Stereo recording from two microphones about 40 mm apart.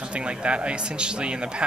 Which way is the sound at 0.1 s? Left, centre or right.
Right.